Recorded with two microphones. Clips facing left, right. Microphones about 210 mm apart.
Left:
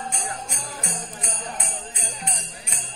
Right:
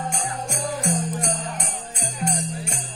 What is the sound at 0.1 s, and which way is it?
Jingle bell, 45° right (ahead or behind).